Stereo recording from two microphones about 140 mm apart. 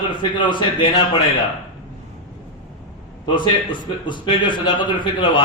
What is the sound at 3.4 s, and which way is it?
A man's voice, 35° left (ahead or behind).